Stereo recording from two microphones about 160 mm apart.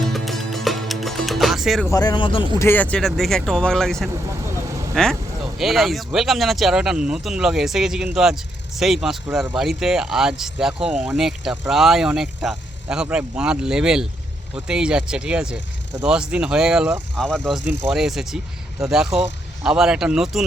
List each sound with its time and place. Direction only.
0.0 s music: centre (ahead or behind)
1.9 s speech: 25° left (ahead or behind)
2.6 s speech: 10° left (ahead or behind)
5.0 s speech: 5° left (ahead or behind)